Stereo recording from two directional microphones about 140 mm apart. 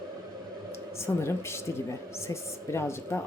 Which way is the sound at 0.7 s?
20° left (ahead or behind).